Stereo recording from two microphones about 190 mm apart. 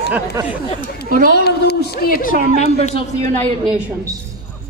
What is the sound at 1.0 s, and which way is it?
Speech, 45° right (ahead or behind).